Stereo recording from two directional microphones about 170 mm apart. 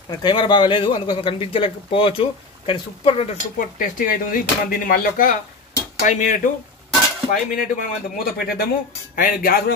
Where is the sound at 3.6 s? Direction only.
55° left (ahead or behind).